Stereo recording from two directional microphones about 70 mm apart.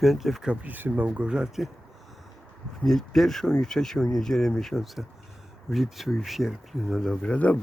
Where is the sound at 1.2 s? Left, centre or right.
Centre.